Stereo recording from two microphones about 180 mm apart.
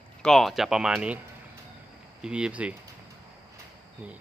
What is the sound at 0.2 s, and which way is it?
Speech, centre (ahead or behind).